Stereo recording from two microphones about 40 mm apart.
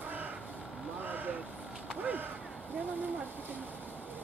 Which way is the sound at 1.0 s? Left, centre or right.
Right.